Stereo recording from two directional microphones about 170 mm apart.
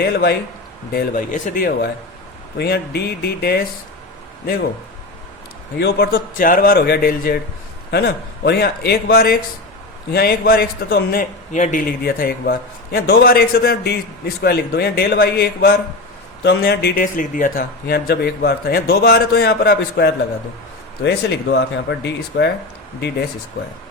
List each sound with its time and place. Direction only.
0.0 s a man's voice: 70° left (ahead or behind)
0.9 s a man's voice: 50° left (ahead or behind)
5.8 s a man's voice: 65° left (ahead or behind)
7.9 s a man's voice: 75° left (ahead or behind)
16.4 s a man's voice: 80° left
21.0 s speech: 85° left